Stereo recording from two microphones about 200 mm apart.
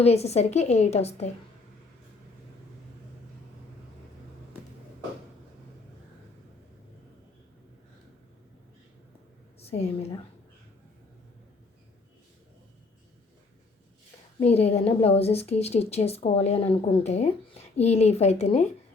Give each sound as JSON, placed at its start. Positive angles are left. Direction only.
{"t": 0.0, "sound": "speech", "side_deg": 30}
{"t": 9.6, "sound": "a woman's voice", "side_deg": 30}
{"t": 14.3, "sound": "speech", "side_deg": 30}